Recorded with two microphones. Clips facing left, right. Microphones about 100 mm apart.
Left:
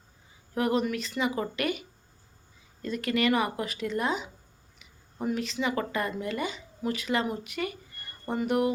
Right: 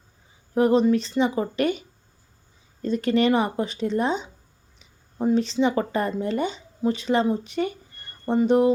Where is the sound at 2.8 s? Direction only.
30° right (ahead or behind).